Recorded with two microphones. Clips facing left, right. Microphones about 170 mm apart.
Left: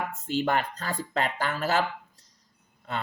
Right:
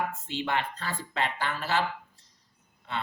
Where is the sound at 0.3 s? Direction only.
45° left (ahead or behind).